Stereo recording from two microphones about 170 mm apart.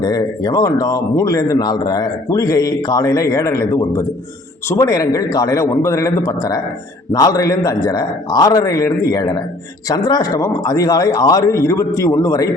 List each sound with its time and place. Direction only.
0.0 s speech: 20° left (ahead or behind)